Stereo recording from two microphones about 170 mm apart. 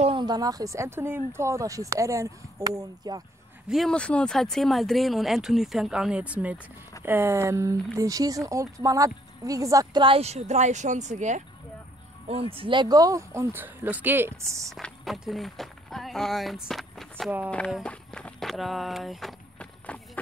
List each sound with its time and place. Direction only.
0.0 s speech: 30° right (ahead or behind)
3.6 s speech: centre (ahead or behind); by 11.4 s 45° right (ahead or behind)
12.3 s speech: 35° right (ahead or behind); by 14.7 s 15° right (ahead or behind)
14.7 s speech: centre (ahead or behind)
17.6 s vehicle: centre (ahead or behind)